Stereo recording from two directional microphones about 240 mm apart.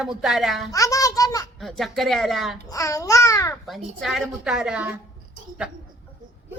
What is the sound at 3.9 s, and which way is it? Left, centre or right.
Speech, centre.